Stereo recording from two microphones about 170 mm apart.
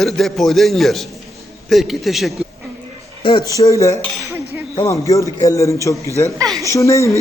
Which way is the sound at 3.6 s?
20° left (ahead or behind).